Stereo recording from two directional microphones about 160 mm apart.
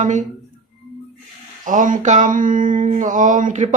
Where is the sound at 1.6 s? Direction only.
55° right (ahead or behind).